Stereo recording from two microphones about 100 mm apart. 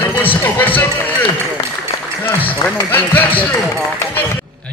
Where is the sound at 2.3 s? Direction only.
15° left (ahead or behind).